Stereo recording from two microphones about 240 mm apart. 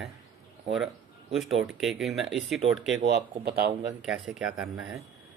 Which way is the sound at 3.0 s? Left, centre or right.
Right.